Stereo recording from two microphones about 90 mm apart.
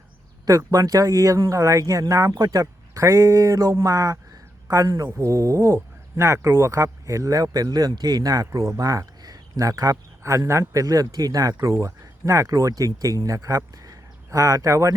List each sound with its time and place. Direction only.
0.4 s speech: 40° right (ahead or behind)
11.5 s speech: 30° right (ahead or behind)